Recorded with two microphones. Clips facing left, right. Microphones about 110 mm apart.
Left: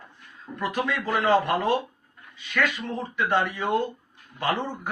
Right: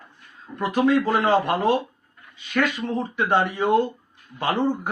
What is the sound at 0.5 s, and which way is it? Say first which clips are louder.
Speech: right 8 dB; 30° right (ahead or behind).